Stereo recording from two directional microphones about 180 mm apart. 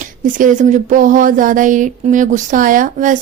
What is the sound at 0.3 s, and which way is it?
A woman's voice, 45° right (ahead or behind).